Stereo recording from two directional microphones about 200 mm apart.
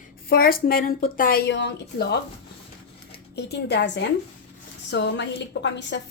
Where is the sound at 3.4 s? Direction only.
55° left (ahead or behind).